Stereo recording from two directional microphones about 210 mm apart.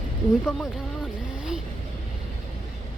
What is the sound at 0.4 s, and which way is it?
Vehicle, centre (ahead or behind).